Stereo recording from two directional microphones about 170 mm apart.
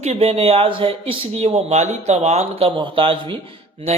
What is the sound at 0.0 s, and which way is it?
Speech, 35° right (ahead or behind).